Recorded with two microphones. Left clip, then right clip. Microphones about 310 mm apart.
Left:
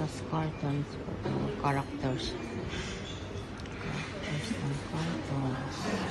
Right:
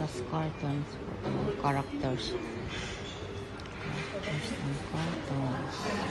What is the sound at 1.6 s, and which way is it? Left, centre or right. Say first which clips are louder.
Speech: left 1 dB; centre.